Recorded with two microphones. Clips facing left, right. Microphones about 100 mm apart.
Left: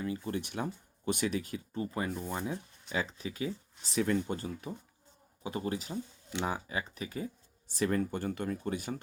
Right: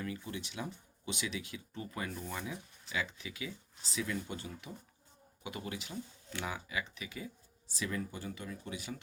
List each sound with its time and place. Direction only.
0.3 s speech: 50° left (ahead or behind)